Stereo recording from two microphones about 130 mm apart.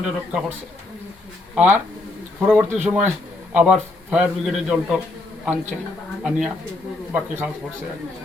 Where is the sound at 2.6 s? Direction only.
15° right (ahead or behind).